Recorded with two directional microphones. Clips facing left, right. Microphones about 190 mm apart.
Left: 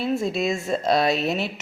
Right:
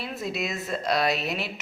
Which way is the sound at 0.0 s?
25° left (ahead or behind).